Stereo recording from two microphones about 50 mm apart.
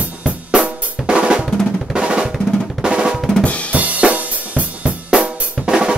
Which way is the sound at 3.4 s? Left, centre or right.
Left.